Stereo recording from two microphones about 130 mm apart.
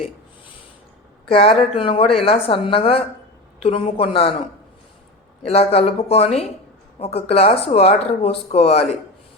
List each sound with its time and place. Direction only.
1.3 s speech: 50° left (ahead or behind)
5.4 s speech: 50° left (ahead or behind)